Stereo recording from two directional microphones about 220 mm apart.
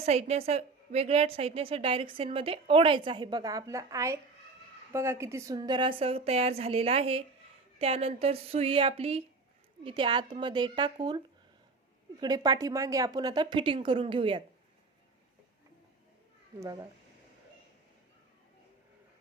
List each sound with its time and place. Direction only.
0.0 s a woman's voice: 30° right (ahead or behind)
12.2 s a woman's voice: 20° right (ahead or behind)
16.6 s speech: 15° right (ahead or behind)